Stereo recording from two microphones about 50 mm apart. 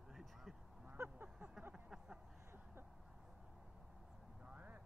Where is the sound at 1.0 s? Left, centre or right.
Right.